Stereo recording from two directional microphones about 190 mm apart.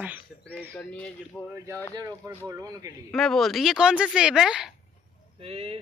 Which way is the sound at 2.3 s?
20° right (ahead or behind).